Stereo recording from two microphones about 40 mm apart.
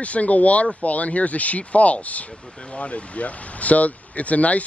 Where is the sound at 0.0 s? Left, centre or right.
Left.